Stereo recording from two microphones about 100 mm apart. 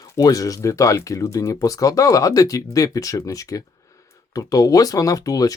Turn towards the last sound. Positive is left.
turn(degrees=35)  # may be behind; listen again after turning